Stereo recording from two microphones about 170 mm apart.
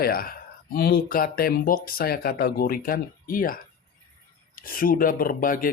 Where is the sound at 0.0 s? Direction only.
60° left (ahead or behind).